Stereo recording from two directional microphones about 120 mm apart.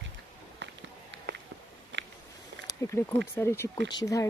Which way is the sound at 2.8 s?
25° left (ahead or behind).